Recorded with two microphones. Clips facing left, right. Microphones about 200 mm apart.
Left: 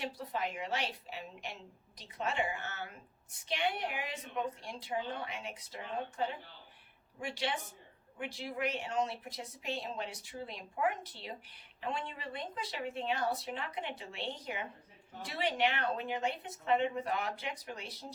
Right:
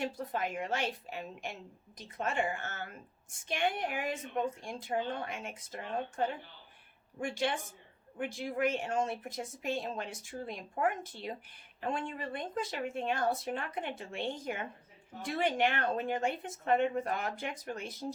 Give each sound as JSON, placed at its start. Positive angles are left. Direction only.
{"t": 0.0, "sound": "a woman's voice", "side_deg": -50}